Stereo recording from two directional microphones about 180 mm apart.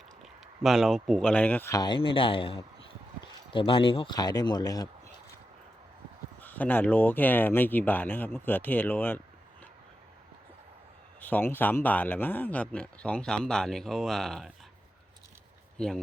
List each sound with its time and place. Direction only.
0.2 s speech: centre (ahead or behind); by 4.9 s 20° left (ahead or behind)
6.4 s speech: 10° left (ahead or behind)
11.2 s speech: 10° left (ahead or behind)
15.8 s speech: 5° left (ahead or behind)